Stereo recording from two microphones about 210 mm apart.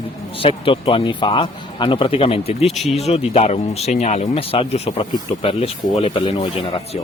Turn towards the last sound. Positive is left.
turn(degrees=25)  # may be behind; listen again after turning